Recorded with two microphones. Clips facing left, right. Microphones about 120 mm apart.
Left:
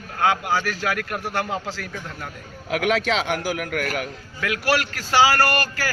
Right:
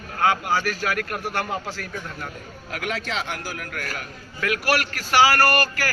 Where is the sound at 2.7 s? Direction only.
80° left.